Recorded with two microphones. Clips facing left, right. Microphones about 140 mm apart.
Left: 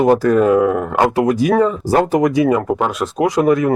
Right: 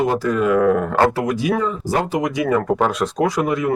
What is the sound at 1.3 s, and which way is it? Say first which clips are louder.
Speech: left 6 dB; 45° left (ahead or behind).